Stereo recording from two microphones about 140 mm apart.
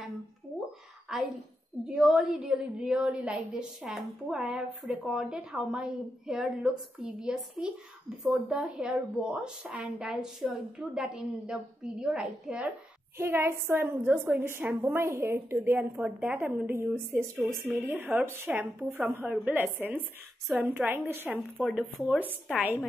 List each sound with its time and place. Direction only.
1.1 s a woman's voice: 5° right (ahead or behind)
13.2 s a woman's voice: 20° right (ahead or behind)
21.5 s a woman's voice: centre (ahead or behind)